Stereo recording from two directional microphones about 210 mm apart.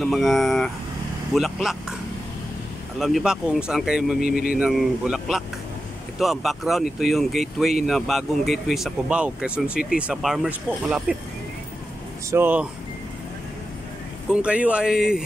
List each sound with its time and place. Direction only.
0.0 s speech: centre (ahead or behind)
3.0 s speech: centre (ahead or behind)
4.3 s speech: 45° left (ahead or behind)
4.6 s speech: 5° right (ahead or behind)
12.3 s speech: 10° right (ahead or behind)
14.3 s speech: 5° right (ahead or behind)